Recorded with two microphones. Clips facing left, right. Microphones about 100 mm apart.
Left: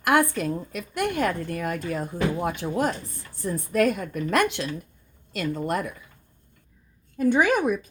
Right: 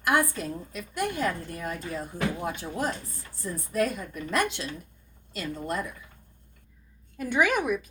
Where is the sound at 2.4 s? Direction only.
60° left (ahead or behind).